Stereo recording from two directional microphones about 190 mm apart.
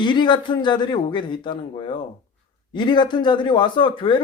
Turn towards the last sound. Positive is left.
turn(degrees=25)  # may be behind; listen again after turning